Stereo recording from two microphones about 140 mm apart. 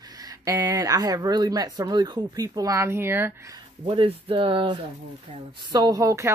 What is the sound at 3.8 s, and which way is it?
Speech, 40° right (ahead or behind).